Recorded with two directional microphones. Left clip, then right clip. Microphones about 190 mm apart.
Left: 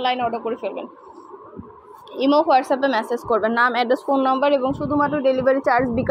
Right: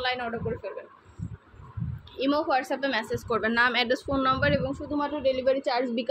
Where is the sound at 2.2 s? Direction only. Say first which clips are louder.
Left 9 dB; 20° left (ahead or behind).